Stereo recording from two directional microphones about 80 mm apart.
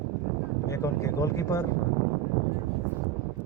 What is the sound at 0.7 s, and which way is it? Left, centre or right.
Speech, left.